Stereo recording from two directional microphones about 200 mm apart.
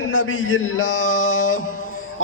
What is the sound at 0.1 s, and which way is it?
Speech, 75° left (ahead or behind).